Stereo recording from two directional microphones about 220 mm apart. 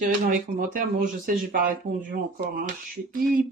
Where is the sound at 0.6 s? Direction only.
40° right (ahead or behind).